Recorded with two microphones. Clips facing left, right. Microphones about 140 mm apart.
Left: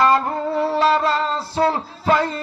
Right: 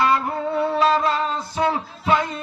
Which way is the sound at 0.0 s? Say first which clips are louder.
Left 3 dB; 40° left (ahead or behind).